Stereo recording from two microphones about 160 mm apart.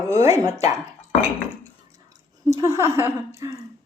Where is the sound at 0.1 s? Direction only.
20° right (ahead or behind).